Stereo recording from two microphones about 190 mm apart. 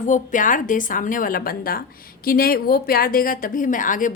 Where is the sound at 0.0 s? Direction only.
40° left (ahead or behind).